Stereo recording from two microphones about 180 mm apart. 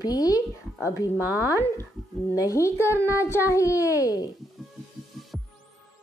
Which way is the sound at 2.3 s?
20° left (ahead or behind).